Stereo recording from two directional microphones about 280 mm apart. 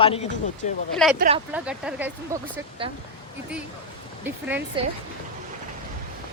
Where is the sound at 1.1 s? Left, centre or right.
Right.